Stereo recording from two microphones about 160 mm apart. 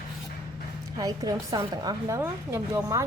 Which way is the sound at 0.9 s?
20° right (ahead or behind).